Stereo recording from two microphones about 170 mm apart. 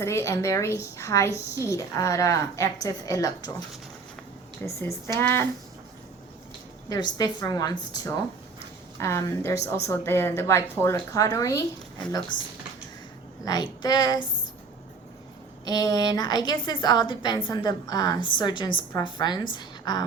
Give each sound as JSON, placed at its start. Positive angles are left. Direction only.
{"t": 0.0, "sound": "a woman's voice", "side_deg": 15}
{"t": 4.6, "sound": "speech", "side_deg": 15}
{"t": 6.8, "sound": "a woman's voice", "side_deg": 20}
{"t": 13.4, "sound": "a child's voice", "side_deg": 25}
{"t": 15.6, "sound": "a woman's voice", "side_deg": 20}